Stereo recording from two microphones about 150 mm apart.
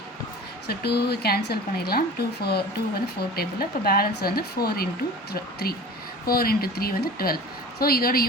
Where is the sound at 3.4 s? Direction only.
90° left.